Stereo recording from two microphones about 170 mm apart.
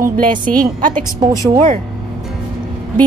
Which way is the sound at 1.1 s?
20° right (ahead or behind).